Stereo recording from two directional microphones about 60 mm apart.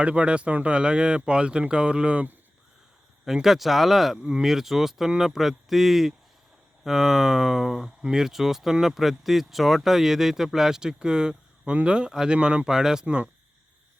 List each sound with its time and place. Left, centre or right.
0.0 s speech: centre
3.2 s speech: centre